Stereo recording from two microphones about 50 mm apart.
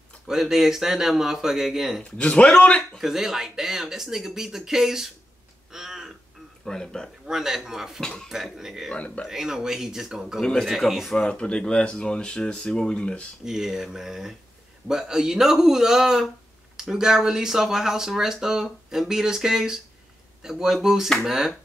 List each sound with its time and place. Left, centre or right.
0.3 s speech: centre
2.0 s speech: left
3.0 s speech: centre
5.7 s a sound: centre
6.6 s speech: centre
7.2 s speech: centre
8.0 s speech: centre
8.5 s speech: centre
8.9 s speech: left
9.3 s speech: centre
10.4 s speech: centre
10.9 s speech: centre
11.1 s speech: centre
13.4 s speech: centre